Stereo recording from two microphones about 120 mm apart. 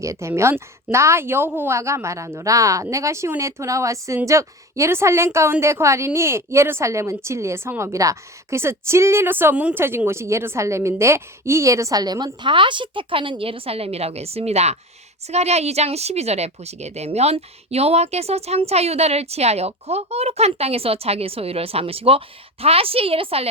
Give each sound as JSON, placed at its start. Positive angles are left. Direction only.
{"t": 0.0, "sound": "a woman's voice", "side_deg": -25}